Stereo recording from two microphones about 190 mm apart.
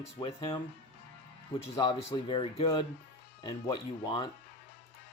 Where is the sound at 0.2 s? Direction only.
25° left (ahead or behind).